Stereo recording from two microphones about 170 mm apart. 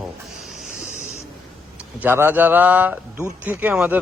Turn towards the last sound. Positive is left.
turn(degrees=-10)  # may be behind; listen again after turning